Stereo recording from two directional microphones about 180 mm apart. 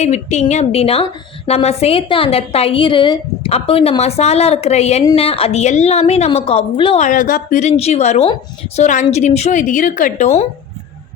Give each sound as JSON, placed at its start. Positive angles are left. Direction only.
{"t": 0.0, "sound": "a woman's voice", "side_deg": 40}
{"t": 7.0, "sound": "a woman's voice", "side_deg": 50}